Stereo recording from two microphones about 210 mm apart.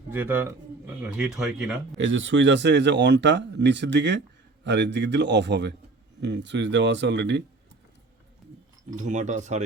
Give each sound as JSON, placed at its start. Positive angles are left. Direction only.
{"t": 0.1, "sound": "speech", "side_deg": -10}
{"t": 2.0, "sound": "speech", "side_deg": -65}
{"t": 9.0, "sound": "speech", "side_deg": -35}